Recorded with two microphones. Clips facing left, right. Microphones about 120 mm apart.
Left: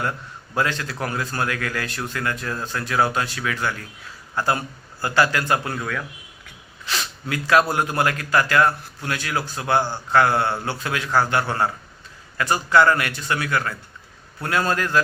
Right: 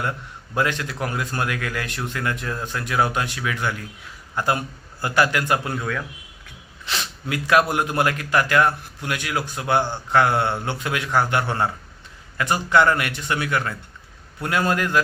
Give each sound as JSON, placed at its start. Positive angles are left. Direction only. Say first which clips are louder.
{"t": 0.5, "sound": "a man's voice", "louder": "right 1 dB", "side_deg": -20}
{"t": 6.8, "sound": "a sound", "louder": "even", "side_deg": -25}
{"t": 7.7, "sound": "a man's voice", "louder": "even", "side_deg": -20}